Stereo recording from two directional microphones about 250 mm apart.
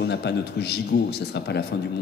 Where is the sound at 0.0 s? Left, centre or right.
Left.